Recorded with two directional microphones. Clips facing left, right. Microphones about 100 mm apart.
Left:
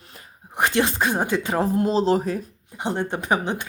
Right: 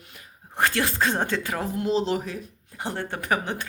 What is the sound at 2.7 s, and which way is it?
Speech, 20° left (ahead or behind).